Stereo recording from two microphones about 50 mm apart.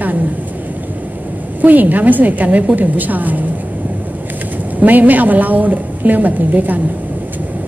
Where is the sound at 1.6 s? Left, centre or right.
Right.